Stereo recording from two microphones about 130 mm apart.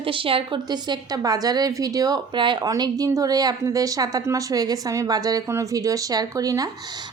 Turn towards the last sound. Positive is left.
turn(degrees=-30)  # may be behind; listen again after turning